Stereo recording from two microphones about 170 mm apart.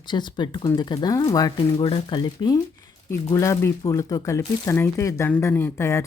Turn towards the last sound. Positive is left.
turn(degrees=15)  # may be behind; listen again after turning